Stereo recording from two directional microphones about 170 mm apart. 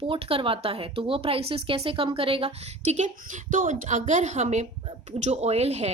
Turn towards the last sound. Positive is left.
turn(degrees=-40)  # may be behind; listen again after turning